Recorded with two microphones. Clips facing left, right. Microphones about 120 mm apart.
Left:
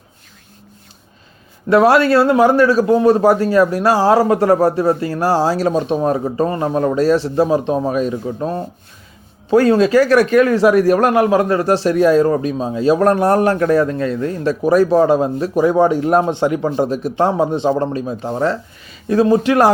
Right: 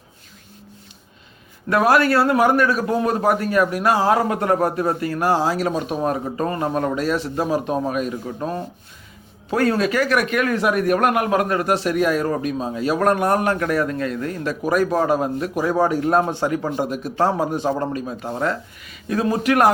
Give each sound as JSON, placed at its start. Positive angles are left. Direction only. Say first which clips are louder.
{"t": 1.7, "sound": "speech", "louder": "left 5 dB", "side_deg": 25}